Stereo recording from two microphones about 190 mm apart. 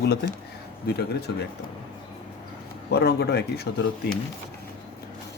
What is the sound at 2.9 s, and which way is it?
Speech, 60° left (ahead or behind).